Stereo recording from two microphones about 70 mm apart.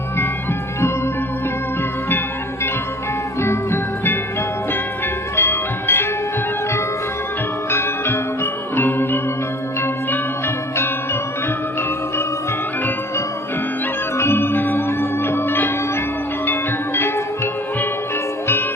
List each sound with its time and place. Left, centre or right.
3.4 s music: left
5.4 s music: left
7.7 s music: left
14.2 s music: left